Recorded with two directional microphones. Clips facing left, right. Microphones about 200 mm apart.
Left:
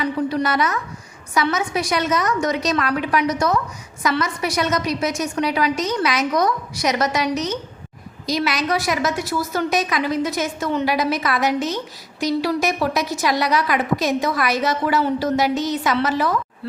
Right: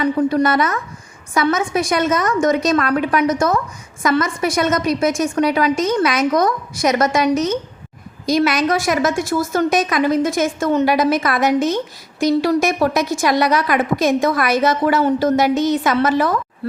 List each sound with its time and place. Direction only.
0.0 s a woman's voice: 45° right (ahead or behind)